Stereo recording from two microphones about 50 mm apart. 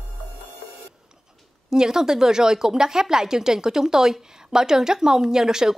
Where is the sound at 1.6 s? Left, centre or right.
Centre.